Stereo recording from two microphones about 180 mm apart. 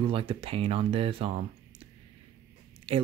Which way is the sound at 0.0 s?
30° right (ahead or behind).